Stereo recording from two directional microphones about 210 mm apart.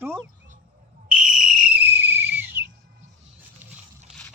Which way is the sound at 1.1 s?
Centre (ahead or behind).